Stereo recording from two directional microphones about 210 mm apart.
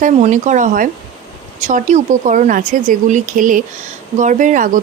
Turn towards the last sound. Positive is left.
turn(degrees=-40)  # may be behind; listen again after turning